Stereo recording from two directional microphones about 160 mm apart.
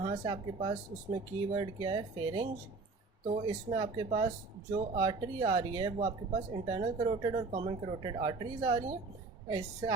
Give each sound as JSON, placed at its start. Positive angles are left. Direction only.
{"t": 0.0, "sound": "speech", "side_deg": -30}